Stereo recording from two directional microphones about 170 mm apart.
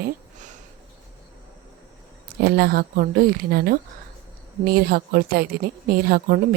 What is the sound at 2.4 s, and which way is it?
A woman's voice, 70° right (ahead or behind).